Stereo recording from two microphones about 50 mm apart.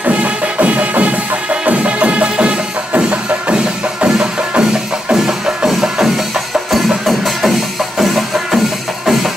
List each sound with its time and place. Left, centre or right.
0.0 s music: right; by 8.5 s centre